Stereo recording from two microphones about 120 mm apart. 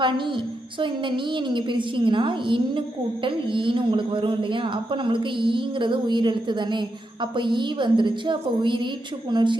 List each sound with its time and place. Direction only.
0.0 s a man's voice: 45° right (ahead or behind)